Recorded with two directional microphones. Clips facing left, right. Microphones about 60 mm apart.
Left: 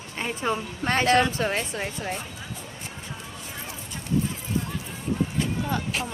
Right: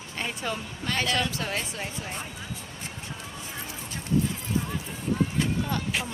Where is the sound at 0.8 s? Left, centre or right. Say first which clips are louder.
Left 7 dB; left.